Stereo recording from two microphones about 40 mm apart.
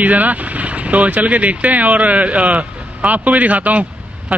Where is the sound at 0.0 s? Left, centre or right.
Right.